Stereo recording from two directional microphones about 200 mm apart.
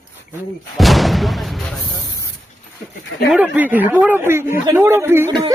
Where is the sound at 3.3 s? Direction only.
10° right (ahead or behind).